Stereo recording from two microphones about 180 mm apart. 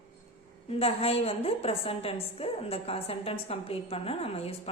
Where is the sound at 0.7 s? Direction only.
35° left (ahead or behind).